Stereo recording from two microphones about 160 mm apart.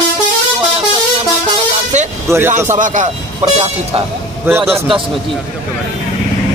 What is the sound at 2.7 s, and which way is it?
Speech, 50° right (ahead or behind).